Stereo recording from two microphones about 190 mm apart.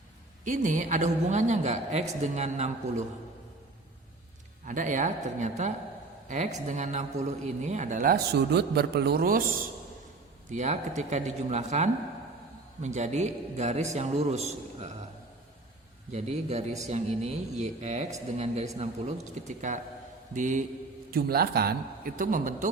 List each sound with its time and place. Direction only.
0.4 s a woman's voice: 45° right (ahead or behind)
4.6 s a woman's voice: 40° right (ahead or behind)
10.5 s a woman's voice: 40° right (ahead or behind)
16.1 s a woman's voice: 35° right (ahead or behind)
21.1 s a man's voice: 55° right (ahead or behind)